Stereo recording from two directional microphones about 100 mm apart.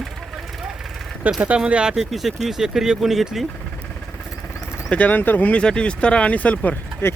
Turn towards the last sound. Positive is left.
turn(degrees=20)  # may be behind; listen again after turning